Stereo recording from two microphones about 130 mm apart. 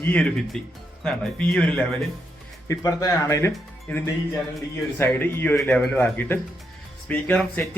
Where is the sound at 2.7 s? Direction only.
25° left (ahead or behind).